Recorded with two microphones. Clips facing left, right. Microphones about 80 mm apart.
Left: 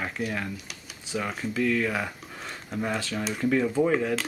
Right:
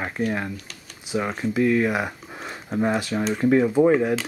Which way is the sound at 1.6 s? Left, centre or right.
Right.